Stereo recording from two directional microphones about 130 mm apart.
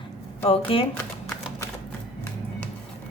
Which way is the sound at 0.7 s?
45° left (ahead or behind).